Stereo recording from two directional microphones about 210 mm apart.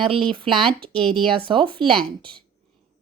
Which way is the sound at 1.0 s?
5° left (ahead or behind).